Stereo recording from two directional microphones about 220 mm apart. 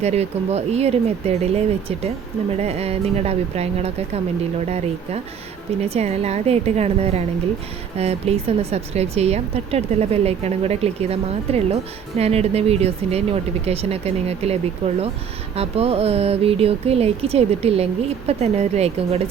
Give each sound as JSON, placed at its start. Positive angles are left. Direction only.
{"t": 0.0, "sound": "speech", "side_deg": -30}
{"t": 5.8, "sound": "speech", "side_deg": -30}